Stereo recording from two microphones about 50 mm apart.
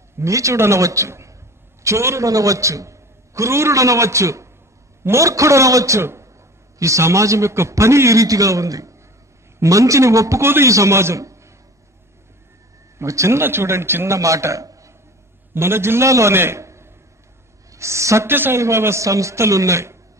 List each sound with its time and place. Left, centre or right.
0.2 s a man's voice: right
6.8 s a man's voice: right
10.4 s a man's voice: right
10.7 s a man's voice: right
13.0 s a man's voice: right
13.4 s speech: right
14.0 s a man's voice: right
15.5 s a man's voice: right
16.5 s a sound: right
17.6 s a woman's voice: right
18.2 s speech: right
18.6 s a woman's voice: right